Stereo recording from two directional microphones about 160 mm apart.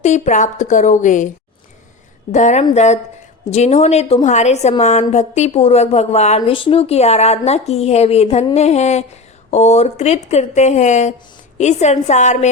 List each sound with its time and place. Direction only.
0.0 s speech: 50° left (ahead or behind)
2.3 s speech: 50° left (ahead or behind)